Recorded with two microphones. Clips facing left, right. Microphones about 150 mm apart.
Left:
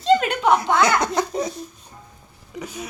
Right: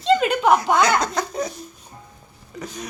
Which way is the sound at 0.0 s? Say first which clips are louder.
Even; centre (ahead or behind).